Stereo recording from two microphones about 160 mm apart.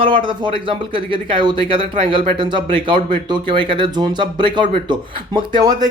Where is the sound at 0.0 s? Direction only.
30° right (ahead or behind).